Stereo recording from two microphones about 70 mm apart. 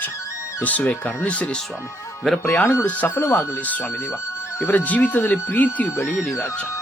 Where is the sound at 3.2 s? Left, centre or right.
Left.